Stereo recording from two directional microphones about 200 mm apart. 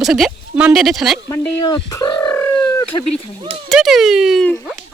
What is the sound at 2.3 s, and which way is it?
Bird, 10° left (ahead or behind).